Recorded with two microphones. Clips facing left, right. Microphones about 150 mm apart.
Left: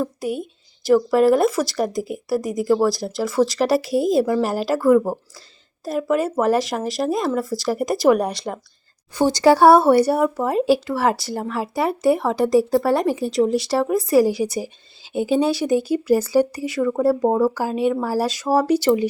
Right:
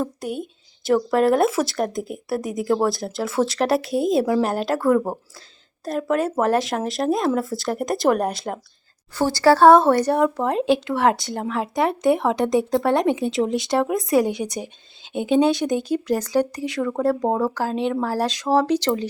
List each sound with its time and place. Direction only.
0.0 s speech: 5° left (ahead or behind)
9.1 s speech: 15° left (ahead or behind)